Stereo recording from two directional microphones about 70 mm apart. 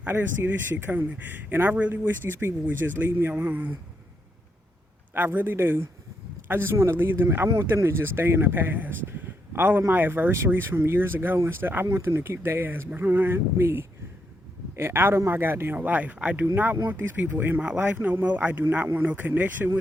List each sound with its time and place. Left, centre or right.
0.0 s speech: right
5.1 s speech: right